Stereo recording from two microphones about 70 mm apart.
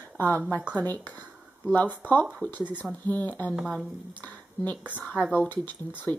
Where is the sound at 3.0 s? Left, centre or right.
Left.